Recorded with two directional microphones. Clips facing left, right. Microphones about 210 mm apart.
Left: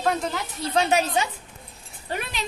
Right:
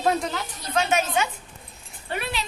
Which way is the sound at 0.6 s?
35° left (ahead or behind).